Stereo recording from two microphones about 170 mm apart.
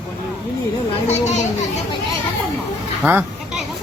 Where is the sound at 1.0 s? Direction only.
40° left (ahead or behind).